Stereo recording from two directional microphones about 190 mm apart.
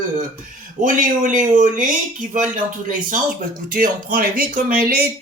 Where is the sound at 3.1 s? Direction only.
45° right (ahead or behind).